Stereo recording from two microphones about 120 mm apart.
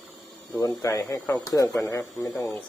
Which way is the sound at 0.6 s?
25° left (ahead or behind).